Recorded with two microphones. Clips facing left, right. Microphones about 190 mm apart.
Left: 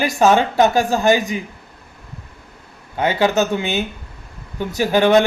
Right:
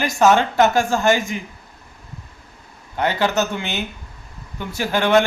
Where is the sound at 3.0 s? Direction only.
15° left (ahead or behind).